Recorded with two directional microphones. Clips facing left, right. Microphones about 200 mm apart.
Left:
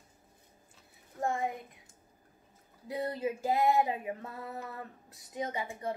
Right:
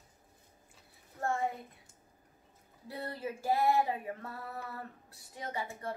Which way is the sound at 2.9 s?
20° left (ahead or behind).